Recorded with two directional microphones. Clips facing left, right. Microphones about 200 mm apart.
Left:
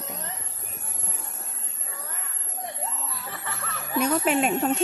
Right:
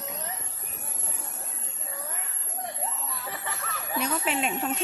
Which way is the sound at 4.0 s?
50° left (ahead or behind).